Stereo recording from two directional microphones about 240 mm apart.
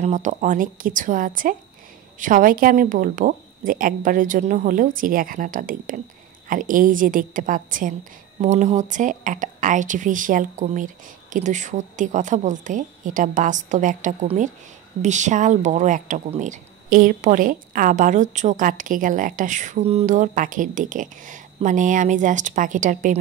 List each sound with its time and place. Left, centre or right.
0.0 s speech: right